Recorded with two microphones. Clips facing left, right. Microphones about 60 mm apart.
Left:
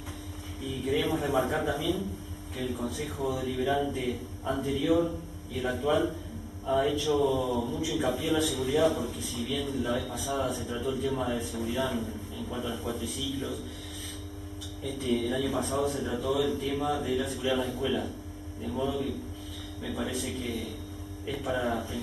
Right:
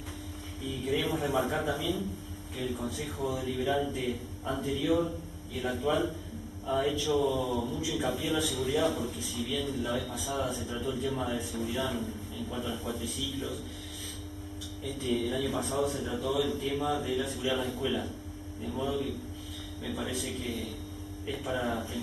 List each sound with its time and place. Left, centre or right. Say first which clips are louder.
0.8 s a man's voice: left 2 dB; centre
3.2 s speech: left 2 dB; left
3.9 s a man's voice: left 1 dB; centre
15.0 s a man's voice: left 2 dB; centre